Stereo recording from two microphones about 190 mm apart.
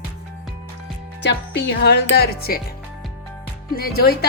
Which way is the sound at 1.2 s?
65° left (ahead or behind).